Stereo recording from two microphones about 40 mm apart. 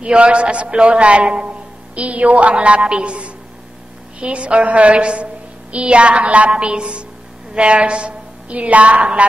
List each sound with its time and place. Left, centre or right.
0.0 s a woman's voice: right